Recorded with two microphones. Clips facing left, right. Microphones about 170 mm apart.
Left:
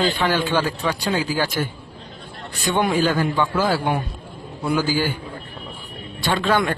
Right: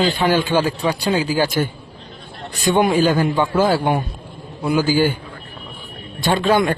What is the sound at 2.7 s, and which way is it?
A man's voice, 15° right (ahead or behind).